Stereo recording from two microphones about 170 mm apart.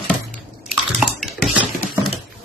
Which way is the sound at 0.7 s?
Centre (ahead or behind).